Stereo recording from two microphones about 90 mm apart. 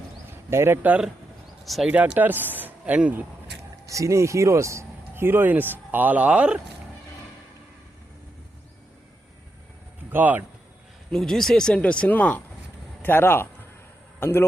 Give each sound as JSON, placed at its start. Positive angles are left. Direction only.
{"t": 0.5, "sound": "speech", "side_deg": -25}
{"t": 1.6, "sound": "speech", "side_deg": 0}
{"t": 1.9, "sound": "speech", "side_deg": -20}
{"t": 3.8, "sound": "speech", "side_deg": -35}
{"t": 10.1, "sound": "speech", "side_deg": -20}
{"t": 11.1, "sound": "a man's voice", "side_deg": 5}